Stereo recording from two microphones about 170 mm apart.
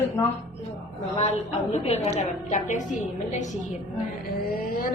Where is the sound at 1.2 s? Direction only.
40° left (ahead or behind).